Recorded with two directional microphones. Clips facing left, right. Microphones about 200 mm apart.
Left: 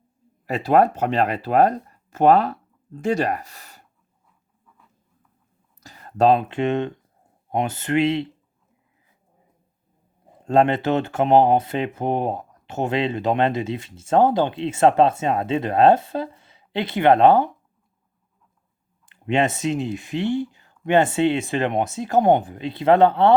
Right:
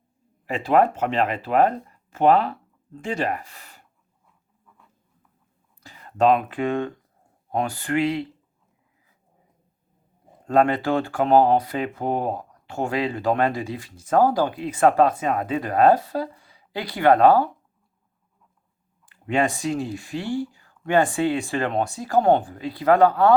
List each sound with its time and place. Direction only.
0.4 s speech: 40° left (ahead or behind)
5.8 s speech: 40° left (ahead or behind); by 8.3 s 25° left (ahead or behind)
10.4 s speech: 25° left (ahead or behind)
19.0 s speech: 20° left (ahead or behind)